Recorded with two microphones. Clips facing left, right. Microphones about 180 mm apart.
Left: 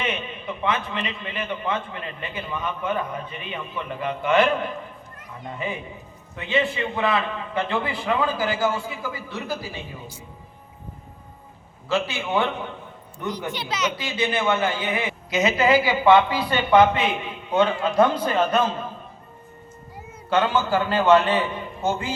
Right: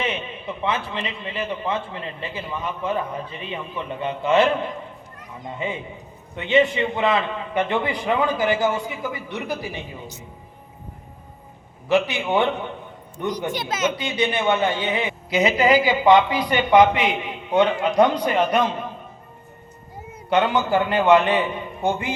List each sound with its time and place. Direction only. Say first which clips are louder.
0.0 s a man's voice: right 1 dB; 30° right (ahead or behind)
11.9 s a man's voice: right 4 dB; 15° right (ahead or behind)
13.5 s speech: right 2 dB; 45° right (ahead or behind)
14.0 s a woman's voice: right 2 dB; 20° right (ahead or behind)
20.3 s a woman's voice: right 2 dB; 15° right (ahead or behind)